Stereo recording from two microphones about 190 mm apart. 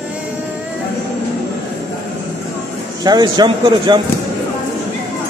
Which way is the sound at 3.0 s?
20° right (ahead or behind).